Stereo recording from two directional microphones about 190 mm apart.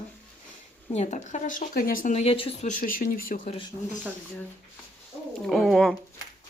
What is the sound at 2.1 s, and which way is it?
Speech, 30° left (ahead or behind).